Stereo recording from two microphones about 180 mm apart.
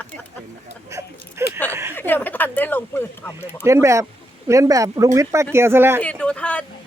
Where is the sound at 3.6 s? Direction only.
15° right (ahead or behind).